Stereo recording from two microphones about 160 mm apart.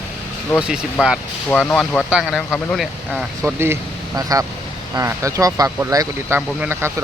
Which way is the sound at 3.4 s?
15° right (ahead or behind).